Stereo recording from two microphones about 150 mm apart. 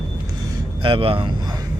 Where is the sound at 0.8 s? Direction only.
35° right (ahead or behind).